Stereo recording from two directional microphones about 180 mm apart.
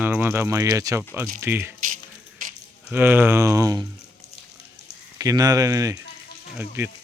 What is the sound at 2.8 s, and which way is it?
Speech, 10° right (ahead or behind).